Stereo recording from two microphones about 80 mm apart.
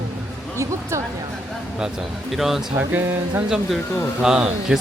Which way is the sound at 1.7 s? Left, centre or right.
Centre.